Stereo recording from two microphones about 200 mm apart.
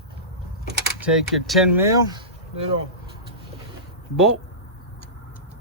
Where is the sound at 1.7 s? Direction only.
15° right (ahead or behind).